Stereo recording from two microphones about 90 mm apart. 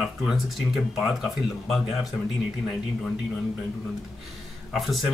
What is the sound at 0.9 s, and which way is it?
Speech, centre (ahead or behind).